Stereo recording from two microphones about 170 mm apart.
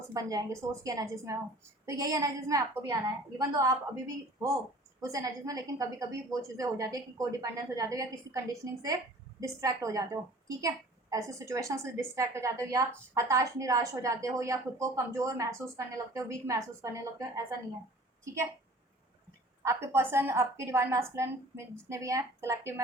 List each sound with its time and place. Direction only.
0.1 s a woman's voice: 20° right (ahead or behind)
19.6 s a woman's voice: 15° right (ahead or behind)